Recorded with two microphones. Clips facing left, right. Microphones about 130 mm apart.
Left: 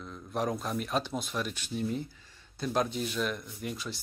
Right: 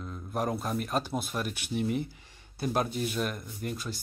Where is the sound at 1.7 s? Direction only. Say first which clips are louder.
Right 4 dB; 70° right (ahead or behind).